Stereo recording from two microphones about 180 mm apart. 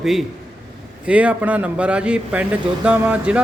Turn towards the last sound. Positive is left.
turn(degrees=-5)  # may be behind; listen again after turning